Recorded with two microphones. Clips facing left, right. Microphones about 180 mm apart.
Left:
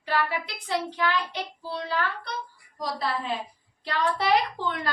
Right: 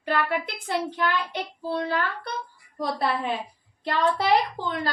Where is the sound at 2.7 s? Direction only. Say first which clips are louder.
Right 4 dB; 60° right (ahead or behind).